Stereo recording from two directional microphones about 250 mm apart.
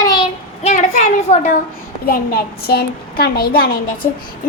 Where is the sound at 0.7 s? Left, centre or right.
Left.